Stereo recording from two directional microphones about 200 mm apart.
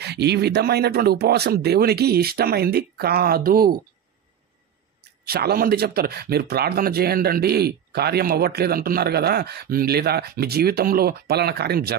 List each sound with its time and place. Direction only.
0.0 s speech: 55° right (ahead or behind)
5.2 s speech: 50° right (ahead or behind)